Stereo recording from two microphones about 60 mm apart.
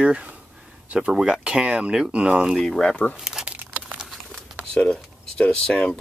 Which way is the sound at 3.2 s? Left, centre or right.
Centre.